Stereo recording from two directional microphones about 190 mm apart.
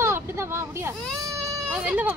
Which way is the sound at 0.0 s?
15° right (ahead or behind).